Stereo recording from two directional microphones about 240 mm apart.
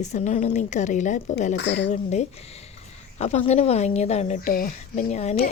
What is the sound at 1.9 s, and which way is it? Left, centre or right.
Speech, left.